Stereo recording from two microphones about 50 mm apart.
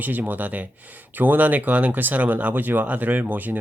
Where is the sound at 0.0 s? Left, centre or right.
Right.